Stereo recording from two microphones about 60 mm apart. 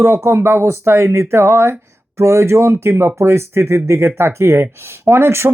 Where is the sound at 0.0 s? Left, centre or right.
Right.